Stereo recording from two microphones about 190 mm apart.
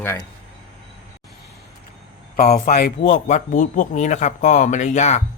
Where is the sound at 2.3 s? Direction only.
50° left (ahead or behind).